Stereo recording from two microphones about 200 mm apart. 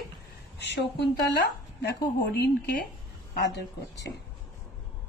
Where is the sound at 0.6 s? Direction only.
60° left (ahead or behind).